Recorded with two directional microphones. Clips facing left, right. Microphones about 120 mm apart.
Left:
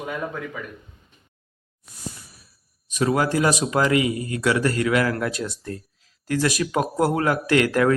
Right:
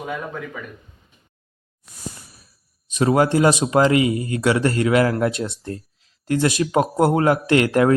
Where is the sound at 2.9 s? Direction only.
30° right (ahead or behind).